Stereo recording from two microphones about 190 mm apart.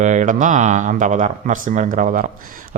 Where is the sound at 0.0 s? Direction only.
40° right (ahead or behind).